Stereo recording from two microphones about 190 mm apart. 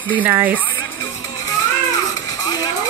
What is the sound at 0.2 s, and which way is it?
Speech, 10° right (ahead or behind).